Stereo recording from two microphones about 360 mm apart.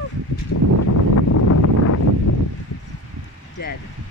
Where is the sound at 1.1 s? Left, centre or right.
Left.